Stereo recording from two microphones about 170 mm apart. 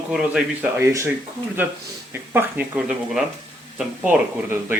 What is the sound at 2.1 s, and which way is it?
Speech, 10° right (ahead or behind).